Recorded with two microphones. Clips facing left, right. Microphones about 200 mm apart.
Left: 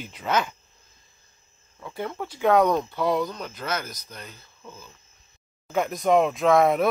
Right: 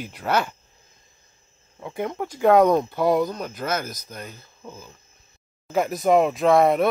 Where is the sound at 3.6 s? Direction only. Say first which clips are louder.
Right 3 dB; 45° right (ahead or behind).